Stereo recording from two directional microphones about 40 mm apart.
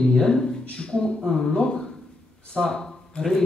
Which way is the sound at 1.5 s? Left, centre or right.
Centre.